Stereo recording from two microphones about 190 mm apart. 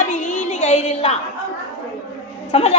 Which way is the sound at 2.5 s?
35° left (ahead or behind).